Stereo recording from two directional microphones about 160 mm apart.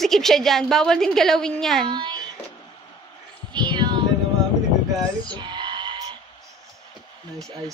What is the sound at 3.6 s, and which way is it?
Music, 30° right (ahead or behind).